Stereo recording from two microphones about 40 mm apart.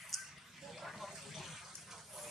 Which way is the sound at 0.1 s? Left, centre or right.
Centre.